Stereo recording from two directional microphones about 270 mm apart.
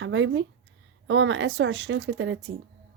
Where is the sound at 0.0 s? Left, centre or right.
Right.